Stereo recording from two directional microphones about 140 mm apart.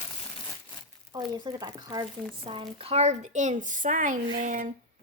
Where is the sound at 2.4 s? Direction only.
40° right (ahead or behind); by 4.7 s 70° right (ahead or behind).